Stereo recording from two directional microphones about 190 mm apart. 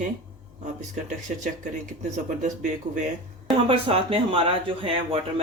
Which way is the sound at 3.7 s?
30° right (ahead or behind).